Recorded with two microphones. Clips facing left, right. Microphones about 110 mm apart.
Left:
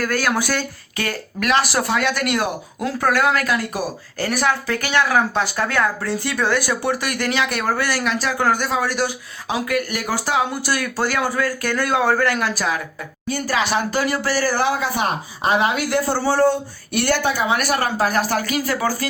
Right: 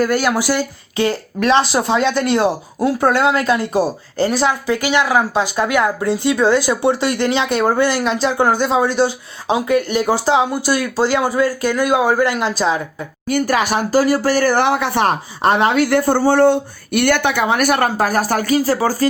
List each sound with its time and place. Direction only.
0.0 s a woman's voice: 15° right (ahead or behind)
13.3 s speech: 50° right (ahead or behind)